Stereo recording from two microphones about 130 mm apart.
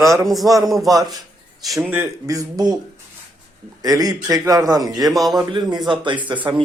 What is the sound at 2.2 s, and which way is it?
Speech, 25° right (ahead or behind).